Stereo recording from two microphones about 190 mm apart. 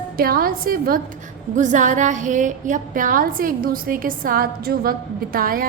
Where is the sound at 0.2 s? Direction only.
50° right (ahead or behind).